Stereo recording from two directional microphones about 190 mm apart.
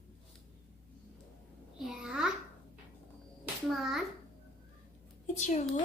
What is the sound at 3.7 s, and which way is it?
Speech, centre (ahead or behind).